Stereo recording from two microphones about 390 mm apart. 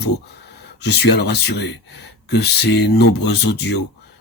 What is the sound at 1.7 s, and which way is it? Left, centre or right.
Speech, left.